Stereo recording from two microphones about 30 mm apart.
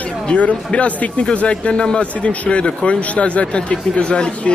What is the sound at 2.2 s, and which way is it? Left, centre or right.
Speech, left.